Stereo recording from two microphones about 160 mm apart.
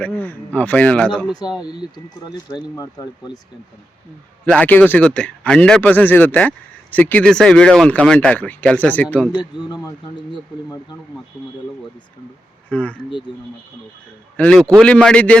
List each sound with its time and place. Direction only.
0.0 s speech: 10° left (ahead or behind)
1.6 s speech: 25° left (ahead or behind)
4.4 s speech: 10° left (ahead or behind)
9.6 s speech: 25° left (ahead or behind)
12.6 s speech: 10° left (ahead or behind)
14.3 s speech: 5° left (ahead or behind)